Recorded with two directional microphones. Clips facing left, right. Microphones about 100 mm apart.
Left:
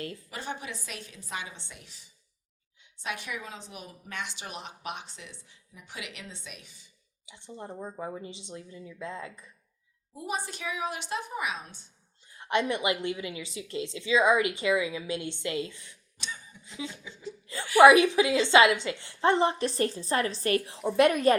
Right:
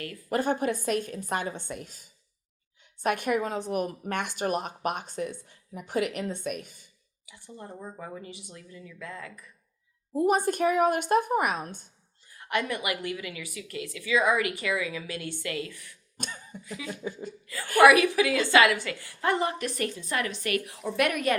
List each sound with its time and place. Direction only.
0.3 s speech: 50° right (ahead or behind)
7.3 s a woman's voice: 25° left (ahead or behind)
10.2 s speech: 50° right (ahead or behind)
12.3 s a woman's voice: 25° left (ahead or behind)
16.1 s cough: 50° right (ahead or behind)
16.6 s a woman's voice: 25° left (ahead or behind)
17.0 s speech: 50° right (ahead or behind)
17.7 s a woman's voice: 20° left (ahead or behind)